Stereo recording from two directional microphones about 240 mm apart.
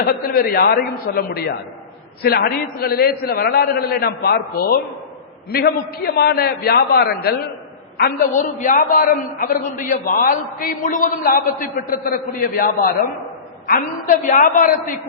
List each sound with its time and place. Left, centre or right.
0.0 s a man's voice: left